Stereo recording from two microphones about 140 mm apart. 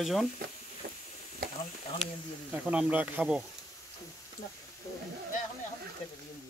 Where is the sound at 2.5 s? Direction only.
10° right (ahead or behind).